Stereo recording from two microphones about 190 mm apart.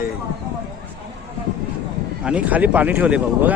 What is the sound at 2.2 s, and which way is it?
Speech, 5° right (ahead or behind).